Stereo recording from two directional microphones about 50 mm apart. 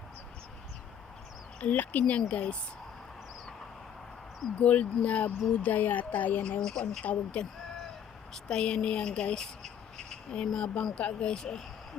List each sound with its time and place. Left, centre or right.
1.6 s speech: left
4.5 s speech: left
6.6 s speech: centre
7.0 s speech: left
8.3 s speech: centre
10.9 s speech: left